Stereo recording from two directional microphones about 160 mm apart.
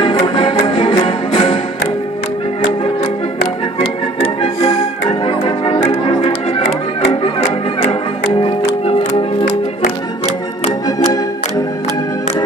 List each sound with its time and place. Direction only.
0.0 s music: 30° left (ahead or behind)
4.2 s music: 40° left (ahead or behind)
7.1 s music: 45° left (ahead or behind)
8.4 s music: 35° left (ahead or behind)